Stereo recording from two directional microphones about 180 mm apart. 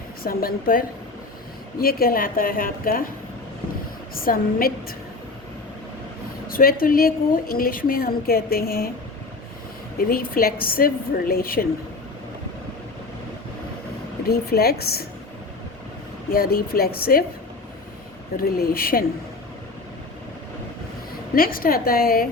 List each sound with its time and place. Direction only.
0.2 s a woman's voice: 55° left (ahead or behind)
4.1 s a woman's voice: 55° left (ahead or behind)
6.5 s a woman's voice: 55° left (ahead or behind)
10.0 s a woman's voice: 55° left (ahead or behind)
14.3 s a woman's voice: 60° left (ahead or behind)
16.3 s a woman's voice: 55° left (ahead or behind)
18.4 s a woman's voice: 60° left (ahead or behind)
21.3 s a woman's voice: 55° left (ahead or behind)